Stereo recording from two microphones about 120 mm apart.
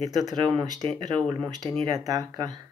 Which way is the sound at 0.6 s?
45° right (ahead or behind).